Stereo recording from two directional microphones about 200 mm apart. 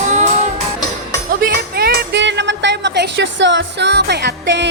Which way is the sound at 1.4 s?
55° right (ahead or behind).